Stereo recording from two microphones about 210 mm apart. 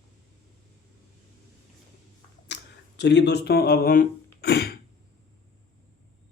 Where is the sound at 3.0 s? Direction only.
55° left (ahead or behind).